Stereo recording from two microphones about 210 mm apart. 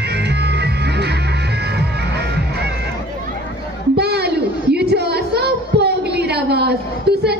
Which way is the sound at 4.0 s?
50° right (ahead or behind).